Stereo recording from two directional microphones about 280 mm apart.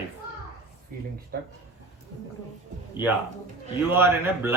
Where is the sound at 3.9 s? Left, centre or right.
Centre.